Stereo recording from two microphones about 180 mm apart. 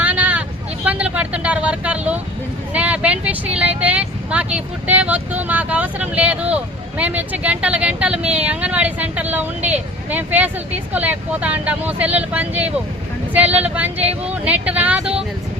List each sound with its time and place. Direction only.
0.0 s vehicle: 10° right (ahead or behind)
2.7 s speech: 5° right (ahead or behind)